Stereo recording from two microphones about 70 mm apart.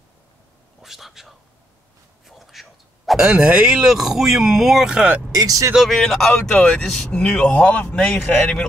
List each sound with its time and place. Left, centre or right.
0.8 s whispering: centre
2.2 s a sound: centre
3.2 s speech: centre
5.3 s speech: right
5.8 s speech: centre
6.5 s a man's voice: centre
8.0 s speech: centre